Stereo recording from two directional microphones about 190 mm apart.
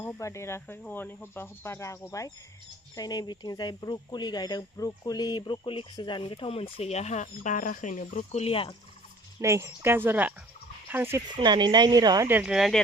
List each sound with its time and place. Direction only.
0.0 s cricket: 15° left (ahead or behind)
2.9 s speech: 20° left (ahead or behind)
9.4 s speech: 15° right (ahead or behind)
11.3 s speech: 25° right (ahead or behind); by 12.8 s centre (ahead or behind)